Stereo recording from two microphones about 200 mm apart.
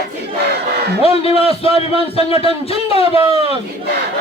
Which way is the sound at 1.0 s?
30° left (ahead or behind).